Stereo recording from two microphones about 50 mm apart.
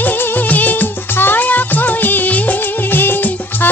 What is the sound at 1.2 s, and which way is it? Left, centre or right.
Music, left.